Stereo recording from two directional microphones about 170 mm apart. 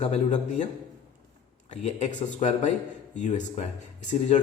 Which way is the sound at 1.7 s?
40° left (ahead or behind).